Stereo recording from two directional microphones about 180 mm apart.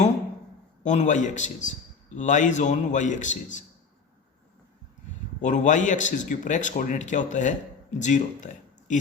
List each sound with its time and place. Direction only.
0.8 s a man's voice: 40° left (ahead or behind)
5.4 s a man's voice: 45° left (ahead or behind)